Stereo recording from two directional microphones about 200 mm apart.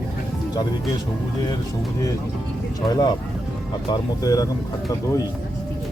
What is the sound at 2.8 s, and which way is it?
Speech, 20° left (ahead or behind).